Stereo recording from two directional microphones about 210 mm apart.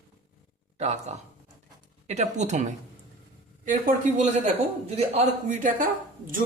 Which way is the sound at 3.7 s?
40° right (ahead or behind).